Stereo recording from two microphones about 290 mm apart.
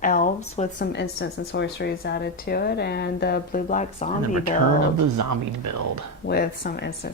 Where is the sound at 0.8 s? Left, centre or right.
Left.